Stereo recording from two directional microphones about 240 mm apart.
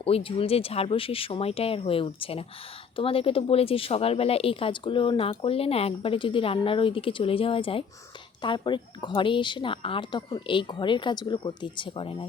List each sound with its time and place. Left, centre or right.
0.0 s speech: left